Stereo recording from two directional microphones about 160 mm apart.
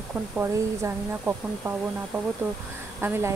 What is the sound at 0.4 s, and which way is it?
Speech, 15° right (ahead or behind).